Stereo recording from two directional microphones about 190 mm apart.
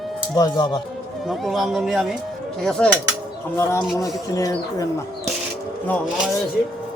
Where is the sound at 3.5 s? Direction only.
15° left (ahead or behind).